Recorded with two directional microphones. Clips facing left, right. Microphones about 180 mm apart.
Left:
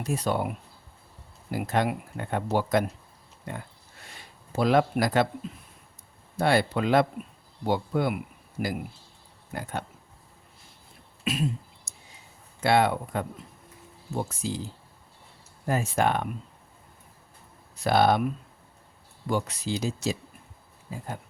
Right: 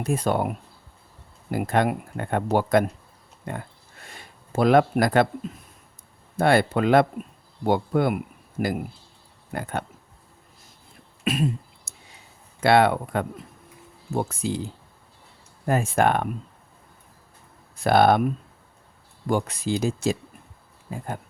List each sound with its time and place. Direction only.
0.0 s speech: 50° right (ahead or behind)
6.3 s speech: 55° right (ahead or behind)
11.2 s throat clearing: 55° right (ahead or behind)
12.6 s speech: 70° right (ahead or behind)
15.6 s speech: 55° right (ahead or behind)
17.7 s speech: 55° right (ahead or behind)
19.3 s speech: 50° right (ahead or behind)